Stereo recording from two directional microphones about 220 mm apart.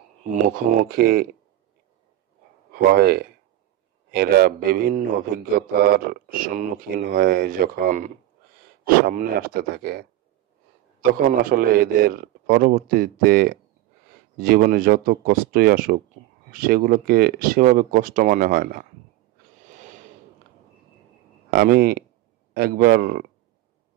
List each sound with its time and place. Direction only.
0.3 s speech: 40° right (ahead or behind)
2.7 s a man's voice: 45° right (ahead or behind)
19.6 s a sound: 35° right (ahead or behind)
21.5 s speech: 45° right (ahead or behind)